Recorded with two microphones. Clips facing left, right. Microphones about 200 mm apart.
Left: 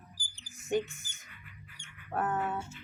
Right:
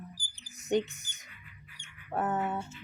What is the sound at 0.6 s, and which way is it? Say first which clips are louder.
Speech: right 2 dB; 20° right (ahead or behind).